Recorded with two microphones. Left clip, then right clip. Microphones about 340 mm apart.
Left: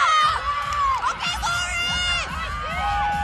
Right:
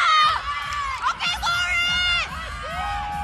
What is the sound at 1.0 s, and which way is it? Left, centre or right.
Hubbub, centre.